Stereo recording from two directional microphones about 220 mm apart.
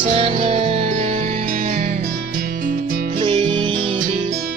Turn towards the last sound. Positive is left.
turn(degrees=-20)  # may be behind; listen again after turning